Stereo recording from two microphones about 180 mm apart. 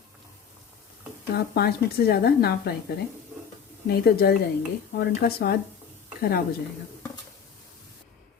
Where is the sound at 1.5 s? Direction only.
60° left (ahead or behind).